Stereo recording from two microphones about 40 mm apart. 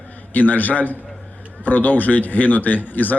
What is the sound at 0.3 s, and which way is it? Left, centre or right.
A man's voice, left.